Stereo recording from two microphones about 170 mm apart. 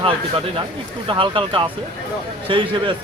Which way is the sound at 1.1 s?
30° right (ahead or behind).